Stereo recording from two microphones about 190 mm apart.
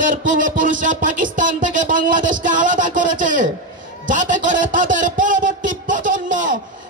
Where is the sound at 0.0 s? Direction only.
45° right (ahead or behind).